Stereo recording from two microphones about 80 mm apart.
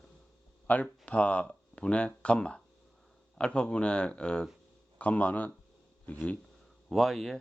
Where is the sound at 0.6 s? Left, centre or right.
Centre.